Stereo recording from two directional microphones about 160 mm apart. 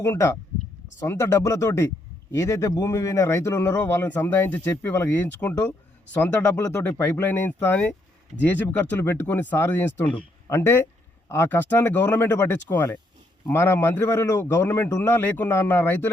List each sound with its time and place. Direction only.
0.0 s a man's voice: 15° left (ahead or behind)
6.7 s a man's voice: 15° left (ahead or behind)